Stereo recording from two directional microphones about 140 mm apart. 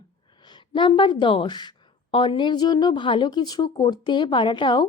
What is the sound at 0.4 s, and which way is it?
A woman's voice, 35° left (ahead or behind).